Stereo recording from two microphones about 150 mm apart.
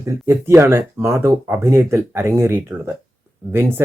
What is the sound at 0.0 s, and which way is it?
Speech, 20° right (ahead or behind).